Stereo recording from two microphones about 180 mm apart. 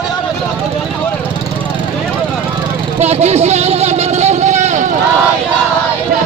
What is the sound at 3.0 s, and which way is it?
Vehicle, 40° right (ahead or behind).